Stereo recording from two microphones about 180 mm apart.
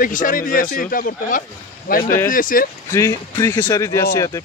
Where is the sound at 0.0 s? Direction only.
50° left (ahead or behind).